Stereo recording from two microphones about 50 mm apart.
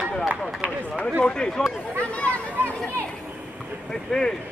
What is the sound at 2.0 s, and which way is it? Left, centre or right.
Chatter, left.